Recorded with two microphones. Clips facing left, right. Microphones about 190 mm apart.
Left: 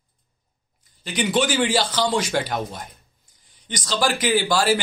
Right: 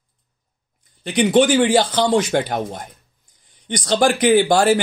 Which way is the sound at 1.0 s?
55° right (ahead or behind).